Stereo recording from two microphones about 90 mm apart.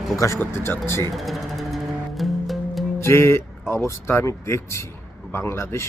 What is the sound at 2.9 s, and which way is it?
Speech, 30° left (ahead or behind).